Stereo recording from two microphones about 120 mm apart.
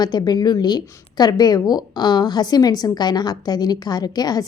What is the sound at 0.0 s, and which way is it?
A woman's voice, 35° left (ahead or behind).